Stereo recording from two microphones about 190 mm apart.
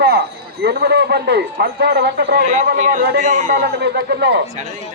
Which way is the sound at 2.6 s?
45° right (ahead or behind).